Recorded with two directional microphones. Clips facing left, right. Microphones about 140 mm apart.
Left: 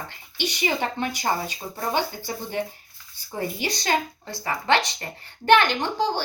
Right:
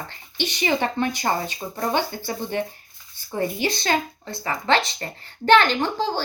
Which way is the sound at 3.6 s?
15° left (ahead or behind).